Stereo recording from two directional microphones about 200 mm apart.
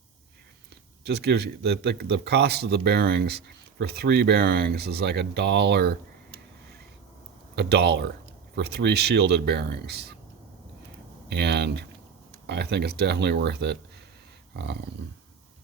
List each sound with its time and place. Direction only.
1.0 s speech: 55° right (ahead or behind)
7.5 s speech: 55° right (ahead or behind)
11.3 s speech: 55° right (ahead or behind)